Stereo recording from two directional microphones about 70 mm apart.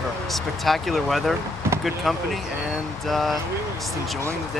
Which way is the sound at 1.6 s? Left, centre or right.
Right.